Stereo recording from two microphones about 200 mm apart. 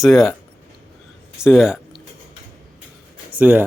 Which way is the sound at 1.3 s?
5° right (ahead or behind).